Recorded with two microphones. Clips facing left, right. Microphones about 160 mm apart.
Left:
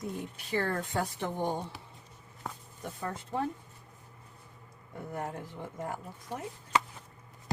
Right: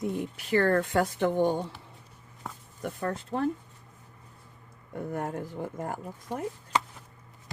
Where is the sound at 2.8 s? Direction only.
65° right (ahead or behind).